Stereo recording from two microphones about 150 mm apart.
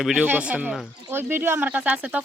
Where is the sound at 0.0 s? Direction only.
5° right (ahead or behind).